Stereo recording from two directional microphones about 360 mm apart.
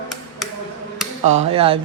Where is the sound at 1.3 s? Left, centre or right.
Centre.